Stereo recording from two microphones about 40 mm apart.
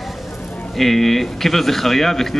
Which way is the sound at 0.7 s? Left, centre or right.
Centre.